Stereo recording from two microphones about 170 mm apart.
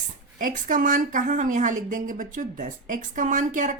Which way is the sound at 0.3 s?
50° right (ahead or behind).